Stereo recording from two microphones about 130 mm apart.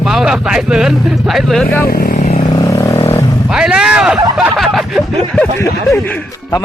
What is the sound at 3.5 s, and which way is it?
Speech, 5° right (ahead or behind).